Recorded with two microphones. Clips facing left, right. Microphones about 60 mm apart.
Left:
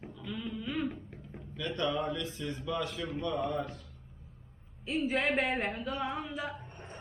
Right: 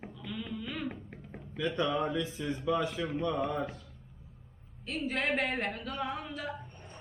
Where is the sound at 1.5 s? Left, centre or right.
Centre.